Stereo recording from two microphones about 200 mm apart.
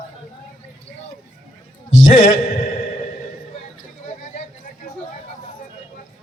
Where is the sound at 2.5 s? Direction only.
45° left (ahead or behind).